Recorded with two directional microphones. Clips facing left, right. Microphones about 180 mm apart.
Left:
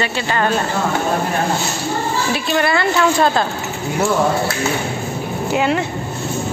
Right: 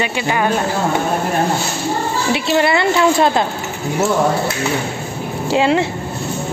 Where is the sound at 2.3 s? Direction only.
25° right (ahead or behind).